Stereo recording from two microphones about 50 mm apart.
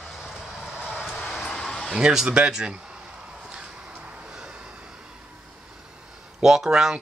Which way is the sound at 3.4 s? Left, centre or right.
Centre.